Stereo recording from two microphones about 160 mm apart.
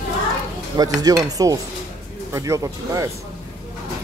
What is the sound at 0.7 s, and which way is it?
Speech, 25° right (ahead or behind).